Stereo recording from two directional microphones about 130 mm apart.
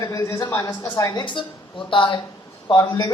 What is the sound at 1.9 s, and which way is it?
A man's voice, 40° left (ahead or behind).